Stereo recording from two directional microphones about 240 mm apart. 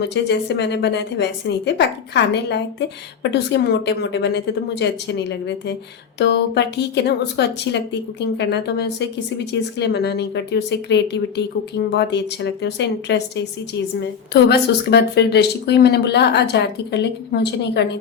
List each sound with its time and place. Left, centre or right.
0.0 s speech: left